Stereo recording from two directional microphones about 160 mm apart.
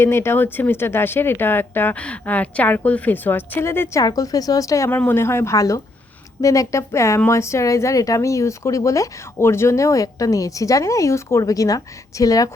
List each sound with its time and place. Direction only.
0.0 s speech: 15° left (ahead or behind)